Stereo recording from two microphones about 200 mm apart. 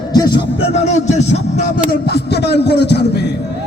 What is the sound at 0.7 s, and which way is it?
Speech, 35° left (ahead or behind).